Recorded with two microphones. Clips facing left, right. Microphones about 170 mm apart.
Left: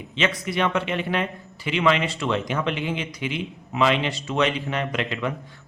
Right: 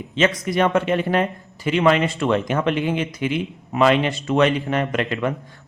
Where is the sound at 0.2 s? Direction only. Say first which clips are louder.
Right 5 dB; 45° right (ahead or behind).